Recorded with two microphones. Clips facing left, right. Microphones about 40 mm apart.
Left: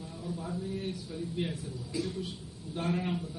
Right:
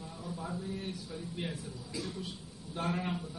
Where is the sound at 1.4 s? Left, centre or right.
Centre.